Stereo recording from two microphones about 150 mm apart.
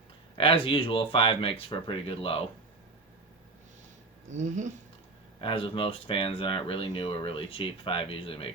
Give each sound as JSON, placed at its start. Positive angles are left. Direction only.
{"t": 0.3, "sound": "speech", "side_deg": 35}
{"t": 4.4, "sound": "speech", "side_deg": -55}
{"t": 5.4, "sound": "speech", "side_deg": 35}